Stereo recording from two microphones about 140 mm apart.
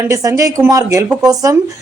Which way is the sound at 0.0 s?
20° right (ahead or behind).